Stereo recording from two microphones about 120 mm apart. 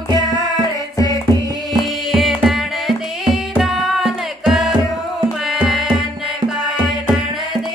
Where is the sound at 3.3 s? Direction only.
Centre (ahead or behind).